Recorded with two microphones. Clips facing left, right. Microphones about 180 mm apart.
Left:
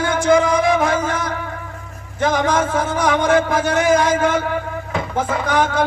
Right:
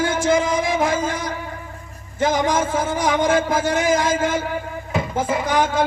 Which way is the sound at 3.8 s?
65° left (ahead or behind).